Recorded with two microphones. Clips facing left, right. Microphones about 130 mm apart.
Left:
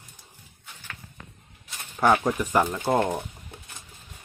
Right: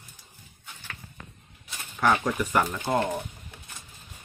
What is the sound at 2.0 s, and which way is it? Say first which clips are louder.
Speech: left 3 dB; 20° left (ahead or behind).